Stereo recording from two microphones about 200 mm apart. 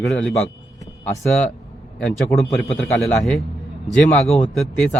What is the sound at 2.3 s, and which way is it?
Speech, centre (ahead or behind).